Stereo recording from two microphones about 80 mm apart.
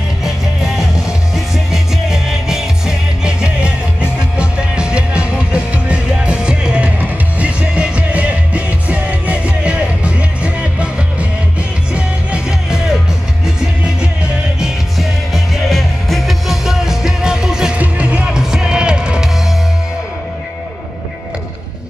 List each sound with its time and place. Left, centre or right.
0.7 s music: centre
14.2 s music: centre